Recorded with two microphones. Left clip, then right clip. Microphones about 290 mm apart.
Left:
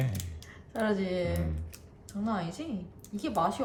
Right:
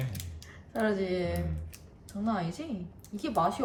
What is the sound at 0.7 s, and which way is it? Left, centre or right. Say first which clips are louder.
Speech: right 1 dB; centre.